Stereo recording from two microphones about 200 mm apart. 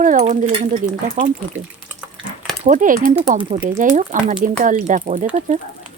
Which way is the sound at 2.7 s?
40° right (ahead or behind).